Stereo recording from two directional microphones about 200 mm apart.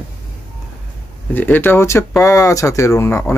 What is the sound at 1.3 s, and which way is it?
Speech, 10° left (ahead or behind).